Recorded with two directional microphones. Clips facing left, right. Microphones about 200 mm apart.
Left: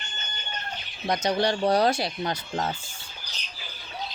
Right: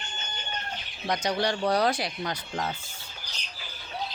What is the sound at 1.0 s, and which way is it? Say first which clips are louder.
Speech: left 3 dB; 25° left (ahead or behind).